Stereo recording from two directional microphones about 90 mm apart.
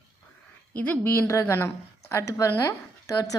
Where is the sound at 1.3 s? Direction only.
30° left (ahead or behind).